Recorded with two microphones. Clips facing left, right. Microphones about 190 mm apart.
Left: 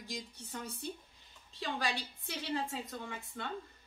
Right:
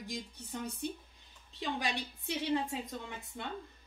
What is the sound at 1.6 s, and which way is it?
Speech, 20° right (ahead or behind).